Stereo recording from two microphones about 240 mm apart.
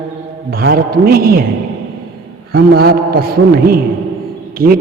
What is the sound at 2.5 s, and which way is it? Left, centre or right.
A man's voice, right.